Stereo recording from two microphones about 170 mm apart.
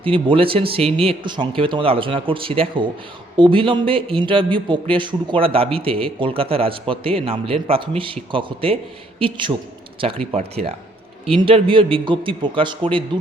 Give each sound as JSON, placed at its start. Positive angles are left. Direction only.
{"t": 0.0, "sound": "a man's voice", "side_deg": -30}